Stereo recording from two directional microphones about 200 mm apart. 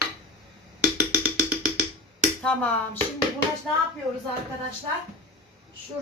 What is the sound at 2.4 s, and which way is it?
Speech, 10° left (ahead or behind).